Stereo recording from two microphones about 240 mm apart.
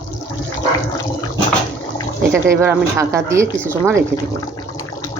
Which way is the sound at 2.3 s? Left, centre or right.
Centre.